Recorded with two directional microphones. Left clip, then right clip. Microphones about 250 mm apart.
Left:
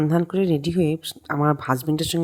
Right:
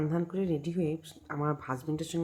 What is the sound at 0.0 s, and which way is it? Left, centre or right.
Speech, left.